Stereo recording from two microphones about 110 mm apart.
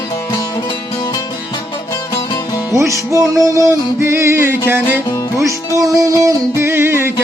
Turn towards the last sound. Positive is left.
turn(degrees=-20)  # may be behind; listen again after turning